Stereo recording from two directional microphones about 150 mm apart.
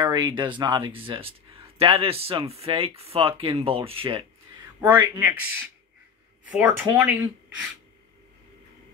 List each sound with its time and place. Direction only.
0.0 s speech: 30° right (ahead or behind)
5.2 s speech: 15° right (ahead or behind)